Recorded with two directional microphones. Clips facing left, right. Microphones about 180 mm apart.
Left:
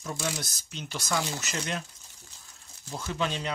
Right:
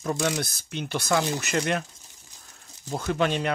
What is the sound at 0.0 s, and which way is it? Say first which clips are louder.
Speech: right 7 dB; 60° right (ahead or behind).